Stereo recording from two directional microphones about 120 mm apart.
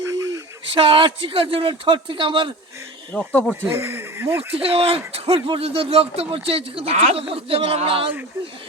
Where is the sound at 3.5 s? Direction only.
20° right (ahead or behind).